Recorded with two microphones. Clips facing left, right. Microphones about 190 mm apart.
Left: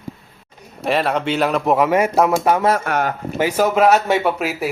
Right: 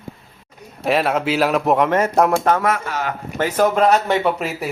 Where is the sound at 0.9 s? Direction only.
Centre (ahead or behind).